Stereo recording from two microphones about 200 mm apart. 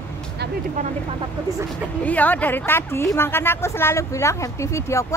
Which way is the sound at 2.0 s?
10° left (ahead or behind).